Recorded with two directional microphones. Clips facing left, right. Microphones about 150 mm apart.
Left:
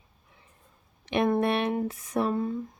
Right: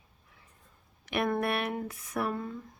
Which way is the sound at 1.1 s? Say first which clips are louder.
Left 5 dB; 20° left (ahead or behind).